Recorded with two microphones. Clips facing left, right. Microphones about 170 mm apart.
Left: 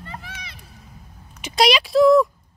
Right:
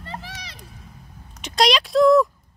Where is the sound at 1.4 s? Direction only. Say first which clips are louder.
Left 1 dB; 5° left (ahead or behind).